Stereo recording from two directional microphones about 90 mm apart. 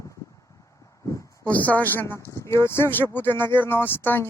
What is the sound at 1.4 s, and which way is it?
Speech, 15° left (ahead or behind).